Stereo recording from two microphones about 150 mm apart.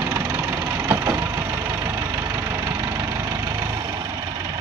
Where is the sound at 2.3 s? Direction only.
15° right (ahead or behind).